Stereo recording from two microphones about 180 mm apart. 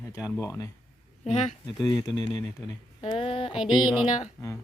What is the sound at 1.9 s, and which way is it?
Speech, centre (ahead or behind).